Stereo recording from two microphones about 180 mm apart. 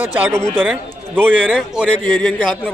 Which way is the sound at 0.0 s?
10° right (ahead or behind).